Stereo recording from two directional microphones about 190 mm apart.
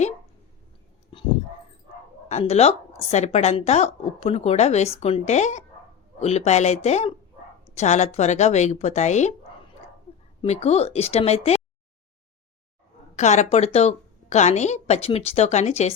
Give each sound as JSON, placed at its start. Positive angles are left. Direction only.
{"t": 1.1, "sound": "a sound", "side_deg": 30}
{"t": 2.3, "sound": "a woman's voice", "side_deg": 35}
{"t": 10.4, "sound": "a woman's voice", "side_deg": 35}
{"t": 13.1, "sound": "a woman's voice", "side_deg": 35}